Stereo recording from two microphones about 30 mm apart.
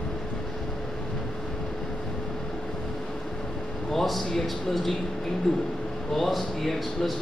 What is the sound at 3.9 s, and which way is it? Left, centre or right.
Speech, centre.